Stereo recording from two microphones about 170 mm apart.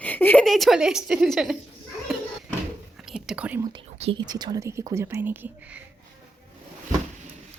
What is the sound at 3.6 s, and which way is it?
Speech, 25° right (ahead or behind).